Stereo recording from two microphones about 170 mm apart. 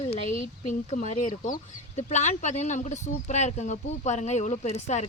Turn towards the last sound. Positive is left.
turn(degrees=40)  # may be behind; listen again after turning